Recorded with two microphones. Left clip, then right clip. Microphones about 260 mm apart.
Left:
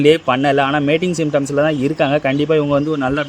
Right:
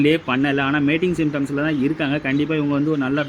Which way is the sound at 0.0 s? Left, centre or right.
Left.